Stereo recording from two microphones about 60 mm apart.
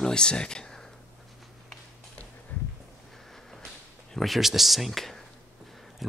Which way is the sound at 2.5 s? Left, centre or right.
Left.